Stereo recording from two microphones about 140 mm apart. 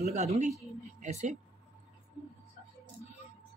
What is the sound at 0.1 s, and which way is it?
Speech, 55° right (ahead or behind).